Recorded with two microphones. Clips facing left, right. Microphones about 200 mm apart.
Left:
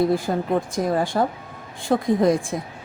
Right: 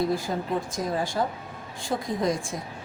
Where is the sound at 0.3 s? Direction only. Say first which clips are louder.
Left 6 dB; 60° left (ahead or behind).